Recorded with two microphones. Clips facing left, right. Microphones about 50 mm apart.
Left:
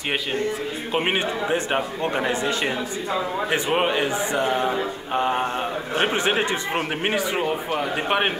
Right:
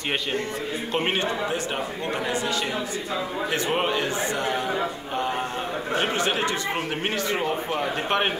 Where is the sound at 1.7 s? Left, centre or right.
Left.